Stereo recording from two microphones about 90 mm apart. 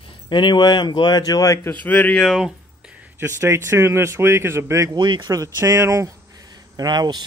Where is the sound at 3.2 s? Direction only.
30° right (ahead or behind).